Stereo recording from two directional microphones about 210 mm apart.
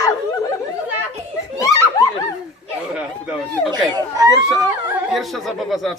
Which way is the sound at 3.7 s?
15° right (ahead or behind).